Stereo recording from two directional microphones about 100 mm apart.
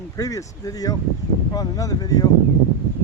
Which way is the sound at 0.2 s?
35° left (ahead or behind).